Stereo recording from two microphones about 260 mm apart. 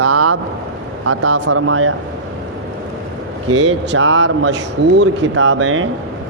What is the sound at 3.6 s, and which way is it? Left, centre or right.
A man's voice, right.